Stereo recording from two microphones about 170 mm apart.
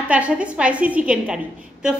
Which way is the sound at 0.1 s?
5° right (ahead or behind).